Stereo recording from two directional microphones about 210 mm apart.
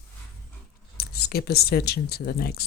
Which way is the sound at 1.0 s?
50° left (ahead or behind).